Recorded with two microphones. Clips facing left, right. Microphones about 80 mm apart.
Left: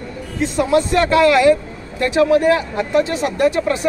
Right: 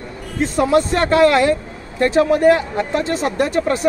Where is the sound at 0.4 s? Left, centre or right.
Right.